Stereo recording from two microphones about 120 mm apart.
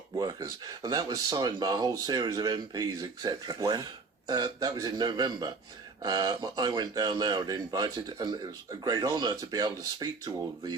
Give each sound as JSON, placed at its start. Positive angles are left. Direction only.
{"t": 0.2, "sound": "speech", "side_deg": -35}